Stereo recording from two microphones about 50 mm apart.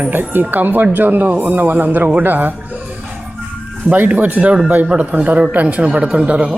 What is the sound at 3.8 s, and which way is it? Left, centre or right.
Speech, right.